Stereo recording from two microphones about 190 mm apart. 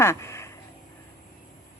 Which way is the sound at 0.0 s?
15° left (ahead or behind).